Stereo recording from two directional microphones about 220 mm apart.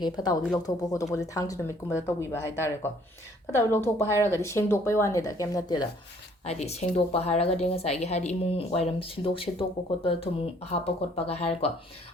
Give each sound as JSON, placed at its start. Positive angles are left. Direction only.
{"t": 0.0, "sound": "speech", "side_deg": 20}
{"t": 6.4, "sound": "a woman's voice", "side_deg": 30}